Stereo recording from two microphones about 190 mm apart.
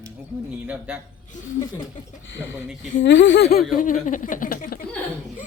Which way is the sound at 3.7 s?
45° left (ahead or behind).